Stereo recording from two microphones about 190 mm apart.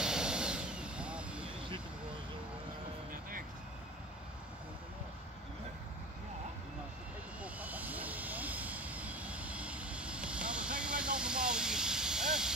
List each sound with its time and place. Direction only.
0.0 s vehicle: 5° right (ahead or behind)
3.1 s music: 45° right (ahead or behind)
7.4 s vehicle: 10° right (ahead or behind)